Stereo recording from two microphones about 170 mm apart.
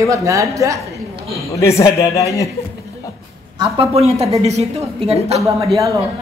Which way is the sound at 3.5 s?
35° right (ahead or behind).